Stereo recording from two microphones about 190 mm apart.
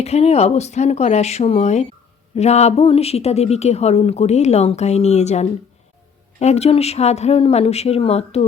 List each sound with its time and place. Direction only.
0.0 s a woman's voice: 35° left (ahead or behind)